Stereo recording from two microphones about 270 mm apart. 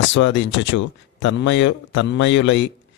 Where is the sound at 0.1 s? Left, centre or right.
Left.